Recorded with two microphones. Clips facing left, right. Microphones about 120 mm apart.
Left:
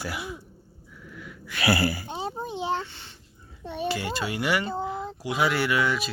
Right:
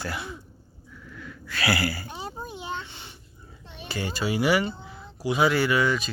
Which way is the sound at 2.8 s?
15° right (ahead or behind).